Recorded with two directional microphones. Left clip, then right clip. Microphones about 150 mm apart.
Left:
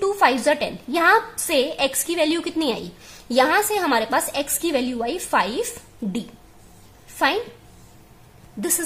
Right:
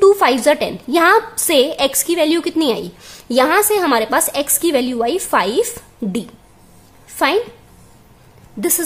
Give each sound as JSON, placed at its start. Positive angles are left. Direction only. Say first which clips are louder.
{"t": 0.0, "sound": "a woman's voice", "louder": "right 7 dB", "side_deg": -30}
{"t": 8.5, "sound": "a woman's voice", "louder": "right 6 dB", "side_deg": -25}